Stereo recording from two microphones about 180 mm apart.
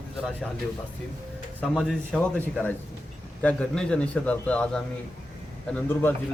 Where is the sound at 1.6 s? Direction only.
Centre (ahead or behind).